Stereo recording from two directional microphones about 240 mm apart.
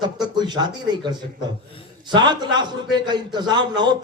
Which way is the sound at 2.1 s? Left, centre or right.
Centre.